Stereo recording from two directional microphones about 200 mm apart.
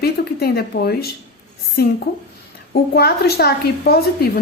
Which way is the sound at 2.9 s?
55° left (ahead or behind).